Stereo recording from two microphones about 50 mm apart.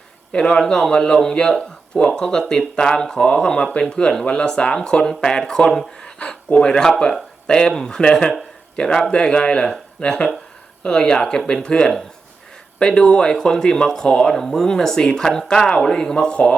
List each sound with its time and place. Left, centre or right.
0.3 s a man's voice: centre